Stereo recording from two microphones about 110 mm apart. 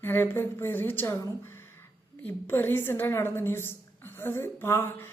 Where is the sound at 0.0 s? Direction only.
20° left (ahead or behind).